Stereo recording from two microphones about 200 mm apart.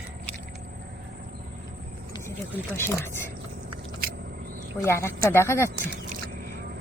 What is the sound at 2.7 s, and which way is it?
Speech, 10° left (ahead or behind).